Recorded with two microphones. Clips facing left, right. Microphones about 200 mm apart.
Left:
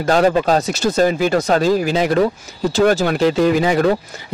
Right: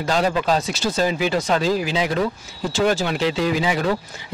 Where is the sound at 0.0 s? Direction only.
50° left (ahead or behind).